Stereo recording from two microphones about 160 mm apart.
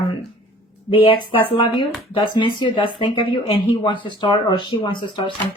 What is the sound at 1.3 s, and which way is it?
A woman's voice, 35° left (ahead or behind).